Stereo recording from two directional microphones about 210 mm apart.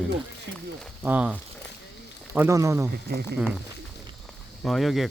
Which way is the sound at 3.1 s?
50° right (ahead or behind).